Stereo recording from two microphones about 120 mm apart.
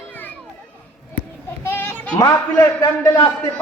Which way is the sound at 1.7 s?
20° left (ahead or behind).